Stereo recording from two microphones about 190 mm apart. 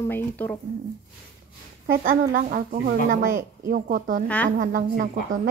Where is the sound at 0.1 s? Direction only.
10° left (ahead or behind).